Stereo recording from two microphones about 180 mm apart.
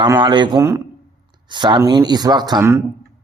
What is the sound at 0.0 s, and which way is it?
A man's voice, 25° right (ahead or behind).